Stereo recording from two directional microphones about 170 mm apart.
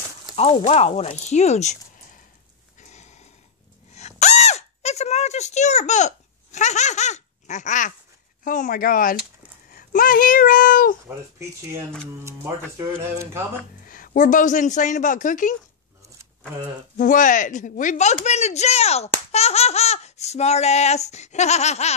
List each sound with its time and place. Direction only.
0.4 s speech: 35° left (ahead or behind)
2.8 s sniff: 45° left (ahead or behind)
3.9 s a sound: 40° left (ahead or behind)
8.5 s speech: 50° left (ahead or behind)
11.1 s speech: 15° right (ahead or behind)
13.8 s speech: 55° left (ahead or behind)
16.9 s speech: 50° left (ahead or behind)